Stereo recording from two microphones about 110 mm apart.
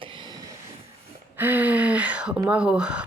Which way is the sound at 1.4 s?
15° right (ahead or behind).